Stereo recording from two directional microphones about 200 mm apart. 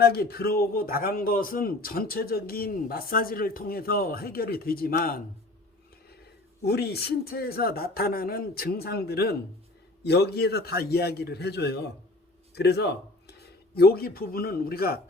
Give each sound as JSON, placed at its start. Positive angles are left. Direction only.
{"t": 0.0, "sound": "a man's voice", "side_deg": 50}
{"t": 6.6, "sound": "a man's voice", "side_deg": 55}